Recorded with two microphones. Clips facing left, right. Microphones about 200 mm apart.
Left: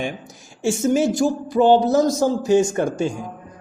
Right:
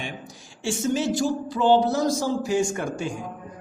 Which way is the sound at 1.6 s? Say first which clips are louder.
Left 3 dB; 15° left (ahead or behind).